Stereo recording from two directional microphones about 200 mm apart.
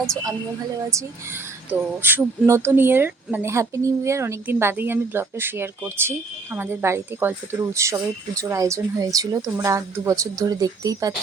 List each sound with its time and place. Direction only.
1.7 s speech: 10° right (ahead or behind)